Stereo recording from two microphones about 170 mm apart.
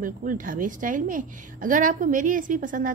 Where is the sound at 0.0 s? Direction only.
50° right (ahead or behind).